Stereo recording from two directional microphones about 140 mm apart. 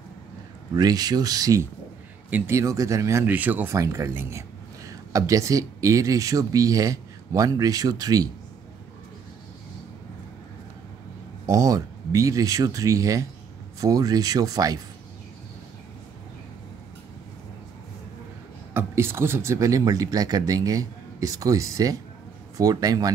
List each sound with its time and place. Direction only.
0.7 s speech: 30° right (ahead or behind)
11.4 s speech: 25° right (ahead or behind)
18.7 s speech: 15° right (ahead or behind)